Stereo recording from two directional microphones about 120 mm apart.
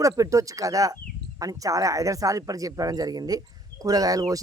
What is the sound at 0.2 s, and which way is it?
A woman's voice, 25° right (ahead or behind).